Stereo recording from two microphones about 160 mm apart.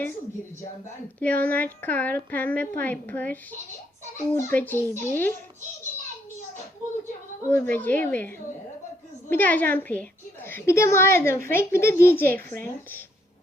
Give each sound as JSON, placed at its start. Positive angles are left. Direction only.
{"t": 1.2, "sound": "a woman's voice", "side_deg": 10}
{"t": 7.5, "sound": "a woman's voice", "side_deg": 10}
{"t": 9.3, "sound": "a woman's voice", "side_deg": 10}